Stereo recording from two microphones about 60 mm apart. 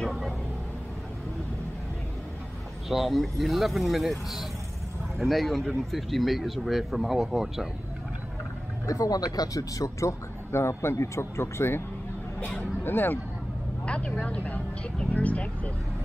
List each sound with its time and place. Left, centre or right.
2.9 s speech: centre
8.8 s speech: left
12.4 s speech: left
13.8 s speech: centre